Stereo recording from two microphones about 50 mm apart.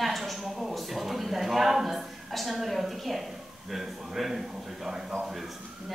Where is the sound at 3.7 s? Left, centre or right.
Centre.